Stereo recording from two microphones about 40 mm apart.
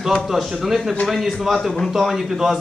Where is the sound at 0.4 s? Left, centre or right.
Centre.